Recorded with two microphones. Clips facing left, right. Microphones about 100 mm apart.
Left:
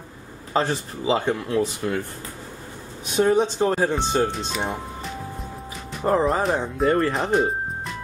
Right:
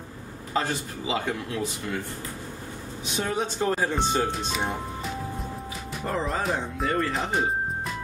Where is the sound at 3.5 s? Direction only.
30° left (ahead or behind).